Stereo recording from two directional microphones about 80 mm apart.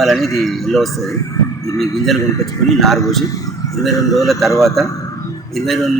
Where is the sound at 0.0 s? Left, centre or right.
Centre.